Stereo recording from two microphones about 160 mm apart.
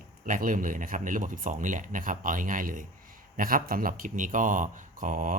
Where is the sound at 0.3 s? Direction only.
55° right (ahead or behind).